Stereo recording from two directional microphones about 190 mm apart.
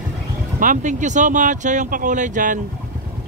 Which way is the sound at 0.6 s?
40° right (ahead or behind).